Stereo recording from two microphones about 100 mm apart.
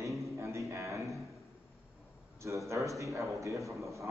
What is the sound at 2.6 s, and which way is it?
A man's voice, 30° right (ahead or behind).